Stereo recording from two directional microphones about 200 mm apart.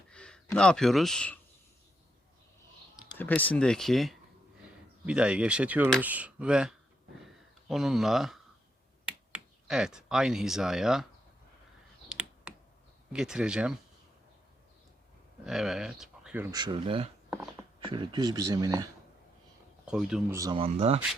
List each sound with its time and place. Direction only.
0.1 s speech: 5° left (ahead or behind)
3.2 s speech: 10° left (ahead or behind)
12.0 s computer keyboard: 5° right (ahead or behind)
13.1 s speech: 5° right (ahead or behind)
15.4 s speech: centre (ahead or behind)
16.6 s speech: 25° right (ahead or behind)
17.2 s a sound: 5° right (ahead or behind)
17.7 s speech: 25° right (ahead or behind)
19.8 s speech: 5° right (ahead or behind)
20.3 s speech: 15° right (ahead or behind)
20.6 s speech: 30° right (ahead or behind)